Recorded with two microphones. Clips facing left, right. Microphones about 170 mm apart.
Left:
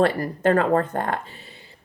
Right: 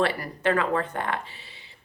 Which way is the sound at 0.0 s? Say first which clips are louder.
Left 5 dB; 45° left (ahead or behind).